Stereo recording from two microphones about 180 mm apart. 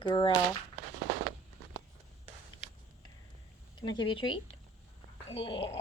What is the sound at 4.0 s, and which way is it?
Speech, 25° left (ahead or behind).